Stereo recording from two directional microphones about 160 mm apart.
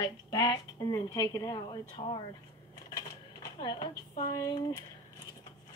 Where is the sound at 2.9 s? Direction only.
25° left (ahead or behind).